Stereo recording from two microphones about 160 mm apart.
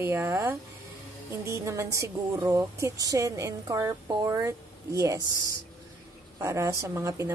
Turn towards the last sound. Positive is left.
turn(degrees=-20)  # may be behind; listen again after turning